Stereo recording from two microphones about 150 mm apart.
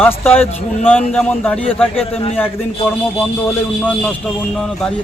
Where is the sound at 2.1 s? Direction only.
40° left (ahead or behind).